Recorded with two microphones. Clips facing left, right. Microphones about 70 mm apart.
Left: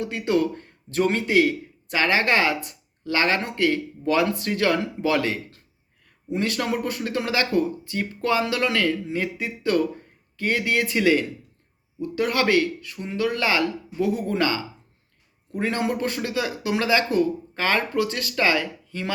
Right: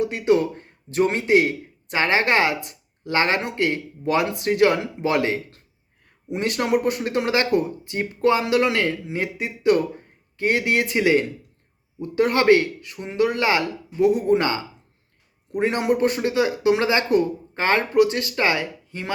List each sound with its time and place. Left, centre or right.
0.0 s speech: right